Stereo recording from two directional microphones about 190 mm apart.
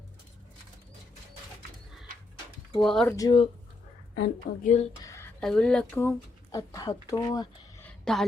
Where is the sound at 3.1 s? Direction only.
25° left (ahead or behind).